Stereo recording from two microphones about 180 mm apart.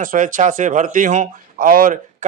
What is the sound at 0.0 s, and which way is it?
Speech, 50° right (ahead or behind).